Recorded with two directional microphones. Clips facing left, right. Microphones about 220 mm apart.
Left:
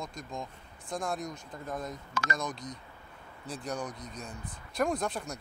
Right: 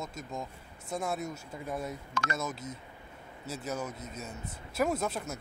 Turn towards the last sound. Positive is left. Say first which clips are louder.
# even
turn(degrees=-5)  # may be behind; listen again after turning